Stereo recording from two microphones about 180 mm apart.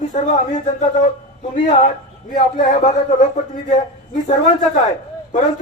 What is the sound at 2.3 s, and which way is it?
A man's voice, 45° left (ahead or behind).